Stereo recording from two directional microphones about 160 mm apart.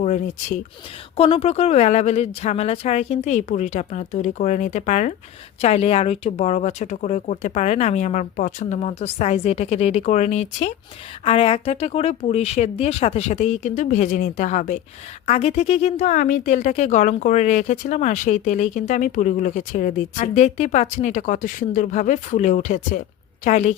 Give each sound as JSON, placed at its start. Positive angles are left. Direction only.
{"t": 0.0, "sound": "speech", "side_deg": 50}